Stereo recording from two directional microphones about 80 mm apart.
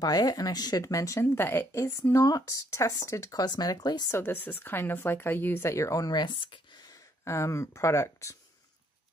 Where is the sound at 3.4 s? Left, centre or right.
Left.